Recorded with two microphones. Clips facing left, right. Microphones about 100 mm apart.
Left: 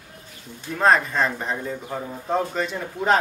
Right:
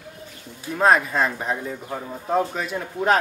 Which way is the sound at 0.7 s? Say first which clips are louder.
Right 1 dB; 5° right (ahead or behind).